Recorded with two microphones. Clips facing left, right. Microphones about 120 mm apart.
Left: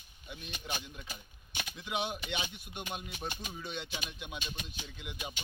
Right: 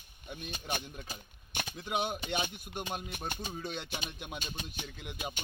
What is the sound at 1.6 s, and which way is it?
Speech, 45° right (ahead or behind).